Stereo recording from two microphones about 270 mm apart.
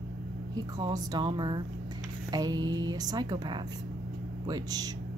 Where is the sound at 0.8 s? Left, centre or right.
Centre.